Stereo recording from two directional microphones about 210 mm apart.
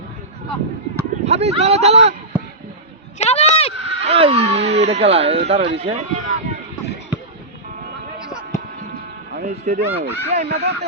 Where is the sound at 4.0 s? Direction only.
30° right (ahead or behind).